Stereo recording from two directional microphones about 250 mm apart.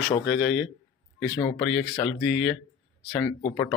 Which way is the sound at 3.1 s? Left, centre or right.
Centre.